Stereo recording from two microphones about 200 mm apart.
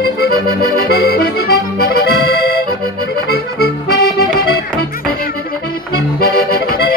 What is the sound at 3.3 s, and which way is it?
Accordion, 50° left (ahead or behind).